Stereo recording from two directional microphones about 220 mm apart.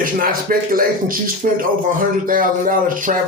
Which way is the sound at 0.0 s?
40° right (ahead or behind).